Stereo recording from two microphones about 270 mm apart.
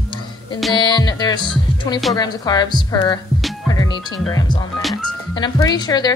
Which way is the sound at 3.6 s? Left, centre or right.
Centre.